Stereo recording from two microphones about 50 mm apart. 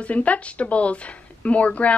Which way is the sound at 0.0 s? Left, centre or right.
Left.